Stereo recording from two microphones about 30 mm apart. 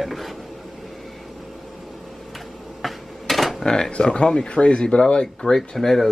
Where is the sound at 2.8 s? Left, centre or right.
Centre.